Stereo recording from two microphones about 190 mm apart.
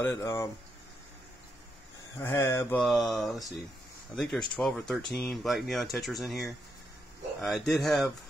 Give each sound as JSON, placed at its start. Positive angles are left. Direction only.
{"t": 0.0, "sound": "speech", "side_deg": 15}
{"t": 2.1, "sound": "speech", "side_deg": 15}